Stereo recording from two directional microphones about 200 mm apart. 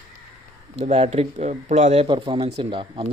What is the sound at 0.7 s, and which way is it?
Speech, 30° right (ahead or behind).